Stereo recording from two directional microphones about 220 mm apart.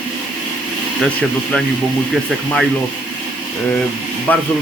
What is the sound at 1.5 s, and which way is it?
Speech, 5° left (ahead or behind).